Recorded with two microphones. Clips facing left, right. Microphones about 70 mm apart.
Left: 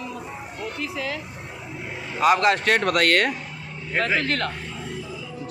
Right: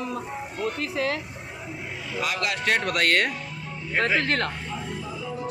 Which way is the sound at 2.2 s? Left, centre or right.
Left.